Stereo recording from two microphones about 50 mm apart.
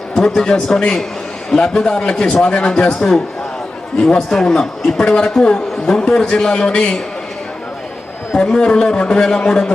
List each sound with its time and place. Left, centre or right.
0.2 s a man's voice: centre
8.4 s a man's voice: centre